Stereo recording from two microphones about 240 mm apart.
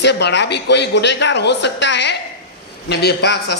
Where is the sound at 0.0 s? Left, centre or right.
Left.